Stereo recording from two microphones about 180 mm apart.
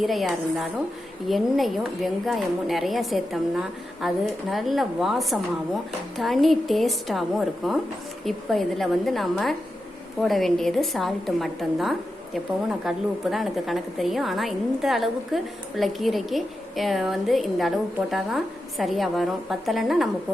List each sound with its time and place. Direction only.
0.0 s a woman's voice: centre (ahead or behind)